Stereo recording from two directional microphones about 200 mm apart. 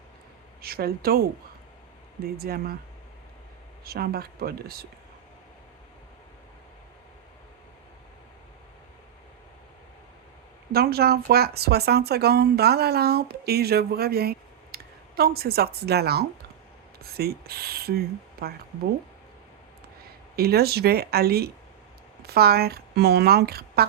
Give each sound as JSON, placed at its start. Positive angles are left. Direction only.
{"t": 0.6, "sound": "speech", "side_deg": -50}
{"t": 2.4, "sound": "speech", "side_deg": -50}
{"t": 3.8, "sound": "speech", "side_deg": -50}
{"t": 10.7, "sound": "speech", "side_deg": -50}
{"t": 20.3, "sound": "speech", "side_deg": -50}